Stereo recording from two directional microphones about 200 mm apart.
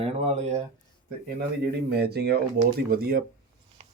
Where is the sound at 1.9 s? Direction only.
55° right (ahead or behind).